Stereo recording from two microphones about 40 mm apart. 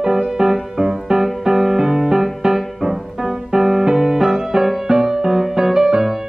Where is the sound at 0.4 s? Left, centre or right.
Centre.